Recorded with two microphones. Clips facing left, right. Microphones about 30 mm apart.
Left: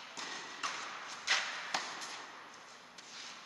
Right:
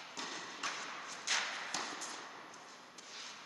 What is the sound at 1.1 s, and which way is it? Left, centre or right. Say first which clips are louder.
Arrow: left 4 dB; centre.